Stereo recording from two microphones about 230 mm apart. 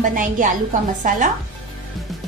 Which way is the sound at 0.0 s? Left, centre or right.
Right.